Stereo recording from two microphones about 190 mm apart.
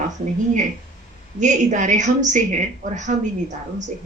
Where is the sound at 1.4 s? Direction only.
40° right (ahead or behind).